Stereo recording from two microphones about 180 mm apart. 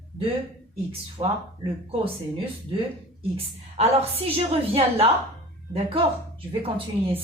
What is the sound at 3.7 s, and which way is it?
A woman's voice, 35° right (ahead or behind).